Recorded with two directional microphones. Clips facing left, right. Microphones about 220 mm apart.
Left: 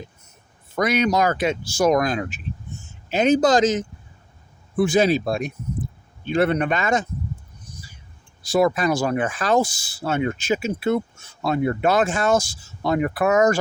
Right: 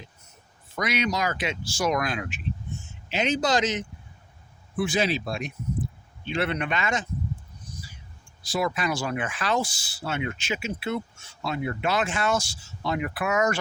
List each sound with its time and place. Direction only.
0.8 s speech: 50° left (ahead or behind)
3.1 s speech: 50° left (ahead or behind)
4.8 s speech: 50° left (ahead or behind)
8.5 s speech: 45° left (ahead or behind)